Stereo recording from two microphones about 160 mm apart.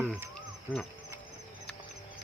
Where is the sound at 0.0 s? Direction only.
10° right (ahead or behind).